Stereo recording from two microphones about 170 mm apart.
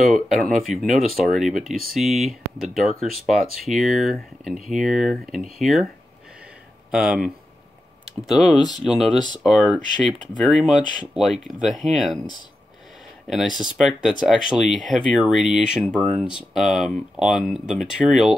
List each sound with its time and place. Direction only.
0.0 s speech: centre (ahead or behind)
6.9 s speech: 5° right (ahead or behind)
8.4 s speech: 5° left (ahead or behind)
10.8 s speech: 25° left (ahead or behind)
11.1 s speech: centre (ahead or behind)
13.6 s speech: centre (ahead or behind)